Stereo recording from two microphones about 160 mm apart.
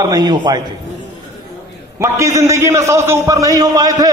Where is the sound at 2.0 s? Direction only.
20° right (ahead or behind).